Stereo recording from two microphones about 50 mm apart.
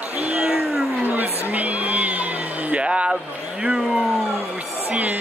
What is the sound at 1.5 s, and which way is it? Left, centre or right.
Music, right.